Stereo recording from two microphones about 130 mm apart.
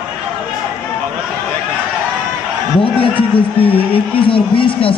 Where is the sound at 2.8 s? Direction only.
45° left (ahead or behind).